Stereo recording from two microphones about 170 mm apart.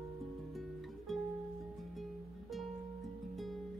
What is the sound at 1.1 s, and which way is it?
Music, centre (ahead or behind).